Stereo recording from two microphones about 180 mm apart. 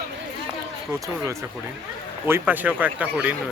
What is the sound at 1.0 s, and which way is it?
A man's voice, 15° right (ahead or behind).